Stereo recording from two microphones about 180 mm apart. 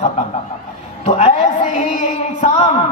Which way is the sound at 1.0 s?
35° left (ahead or behind).